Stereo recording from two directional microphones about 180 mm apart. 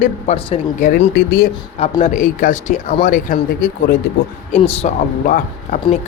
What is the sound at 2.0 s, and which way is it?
Speech, 45° left (ahead or behind).